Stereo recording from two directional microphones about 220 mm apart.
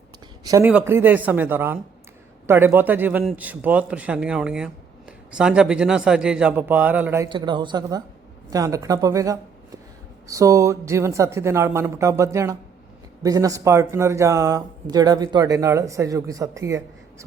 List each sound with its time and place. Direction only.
0.4 s speech: 10° right (ahead or behind)